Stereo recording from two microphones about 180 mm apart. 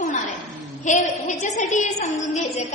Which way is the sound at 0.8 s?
40° left (ahead or behind).